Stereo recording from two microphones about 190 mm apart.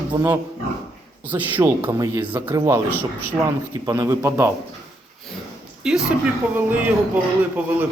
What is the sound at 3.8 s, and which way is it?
Speech, 15° right (ahead or behind).